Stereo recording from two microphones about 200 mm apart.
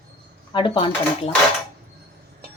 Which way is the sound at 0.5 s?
25° left (ahead or behind).